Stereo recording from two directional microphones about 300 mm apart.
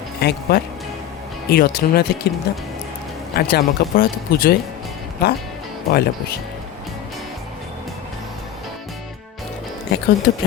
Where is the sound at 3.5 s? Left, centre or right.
Left.